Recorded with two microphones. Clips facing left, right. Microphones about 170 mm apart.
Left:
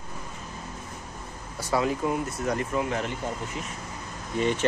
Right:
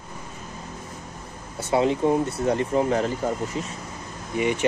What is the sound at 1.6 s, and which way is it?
Speech, 25° right (ahead or behind).